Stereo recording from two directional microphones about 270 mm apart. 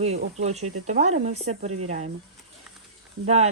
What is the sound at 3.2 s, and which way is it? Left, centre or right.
Speech, right.